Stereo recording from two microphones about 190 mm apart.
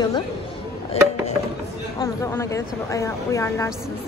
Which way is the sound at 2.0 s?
15° left (ahead or behind).